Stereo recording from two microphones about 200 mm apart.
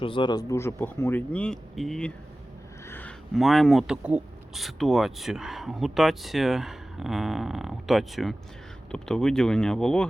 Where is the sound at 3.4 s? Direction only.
Centre (ahead or behind).